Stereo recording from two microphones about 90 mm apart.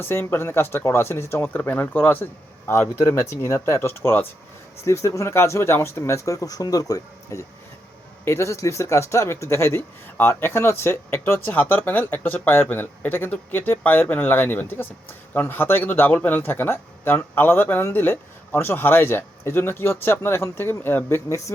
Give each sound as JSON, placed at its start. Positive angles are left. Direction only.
{"t": 0.0, "sound": "speech", "side_deg": 25}